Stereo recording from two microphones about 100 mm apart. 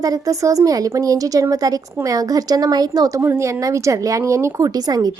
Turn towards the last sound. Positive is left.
turn(degrees=-40)  # may be behind; listen again after turning